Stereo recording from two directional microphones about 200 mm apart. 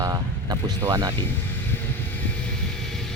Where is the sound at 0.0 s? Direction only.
20° right (ahead or behind).